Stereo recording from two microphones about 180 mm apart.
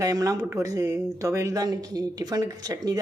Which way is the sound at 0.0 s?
20° right (ahead or behind).